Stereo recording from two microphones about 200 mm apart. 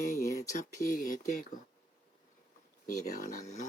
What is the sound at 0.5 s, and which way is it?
Speech, 40° left (ahead or behind).